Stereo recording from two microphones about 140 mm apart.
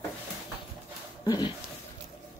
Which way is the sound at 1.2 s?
30° left (ahead or behind).